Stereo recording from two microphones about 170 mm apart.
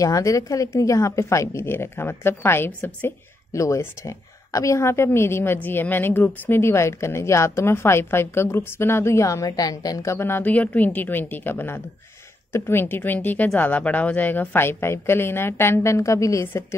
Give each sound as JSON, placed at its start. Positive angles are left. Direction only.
{"t": 0.0, "sound": "a woman's voice", "side_deg": 20}